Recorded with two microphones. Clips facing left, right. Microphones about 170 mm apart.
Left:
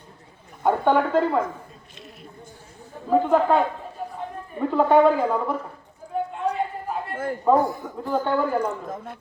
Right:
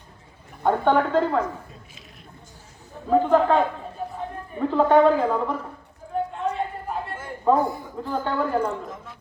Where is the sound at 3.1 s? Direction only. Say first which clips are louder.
Even; 5° left (ahead or behind).